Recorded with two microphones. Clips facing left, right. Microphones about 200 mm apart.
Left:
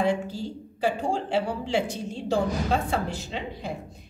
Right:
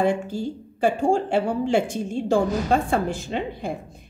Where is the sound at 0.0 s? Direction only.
50° right (ahead or behind).